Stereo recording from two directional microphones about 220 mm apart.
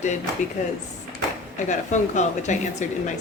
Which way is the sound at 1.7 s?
35° left (ahead or behind).